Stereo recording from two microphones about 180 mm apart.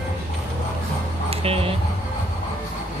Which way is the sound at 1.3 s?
35° right (ahead or behind).